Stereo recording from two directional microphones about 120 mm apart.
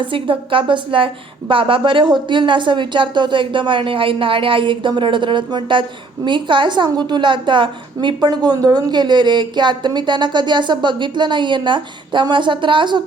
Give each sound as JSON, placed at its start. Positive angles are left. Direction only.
{"t": 0.0, "sound": "a woman's voice", "side_deg": -45}